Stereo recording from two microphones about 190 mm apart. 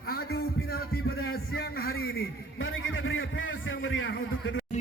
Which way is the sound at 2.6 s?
90° left.